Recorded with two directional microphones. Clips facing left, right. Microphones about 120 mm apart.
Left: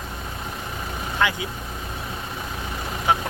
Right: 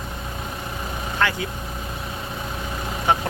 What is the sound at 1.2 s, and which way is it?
Speech, 15° left (ahead or behind).